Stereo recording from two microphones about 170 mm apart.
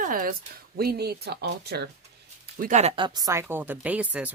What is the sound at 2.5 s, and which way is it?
Speech, 50° right (ahead or behind).